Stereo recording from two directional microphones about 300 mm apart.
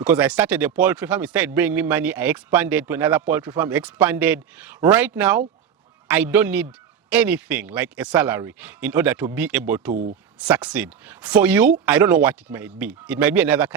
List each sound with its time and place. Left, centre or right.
0.0 s speech: centre
9.9 s speech: right
10.4 s speech: centre